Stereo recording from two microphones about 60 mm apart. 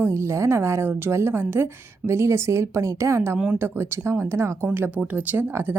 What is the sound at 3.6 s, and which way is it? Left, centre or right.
A woman's voice, right.